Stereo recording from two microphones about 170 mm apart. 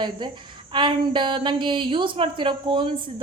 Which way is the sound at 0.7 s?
30° right (ahead or behind).